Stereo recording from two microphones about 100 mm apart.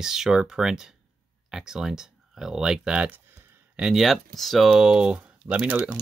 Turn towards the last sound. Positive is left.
turn(degrees=-10)  # may be behind; listen again after turning